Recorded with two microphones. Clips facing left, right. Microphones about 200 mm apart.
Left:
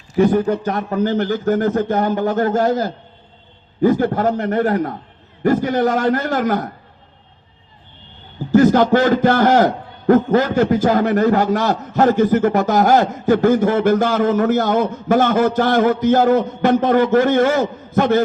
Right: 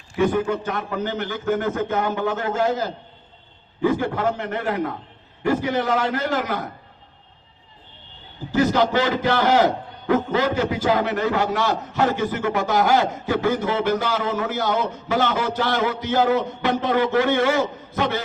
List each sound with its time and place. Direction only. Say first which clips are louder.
0.2 s a man's voice: left 6 dB; 40° left (ahead or behind)
8.5 s a man's voice: left 7 dB; 50° left (ahead or behind)